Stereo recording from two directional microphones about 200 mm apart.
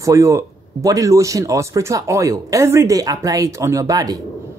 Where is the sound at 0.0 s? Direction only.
15° right (ahead or behind).